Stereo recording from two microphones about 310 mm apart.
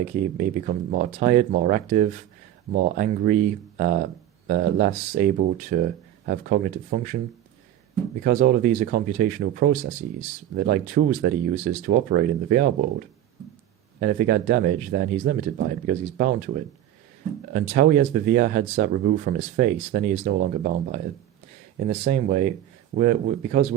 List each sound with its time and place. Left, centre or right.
0.3 s speech: right
8.2 s speech: right
14.0 s speech: right
17.5 s speech: right